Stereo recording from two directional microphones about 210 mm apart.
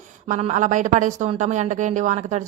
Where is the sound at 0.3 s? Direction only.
35° right (ahead or behind).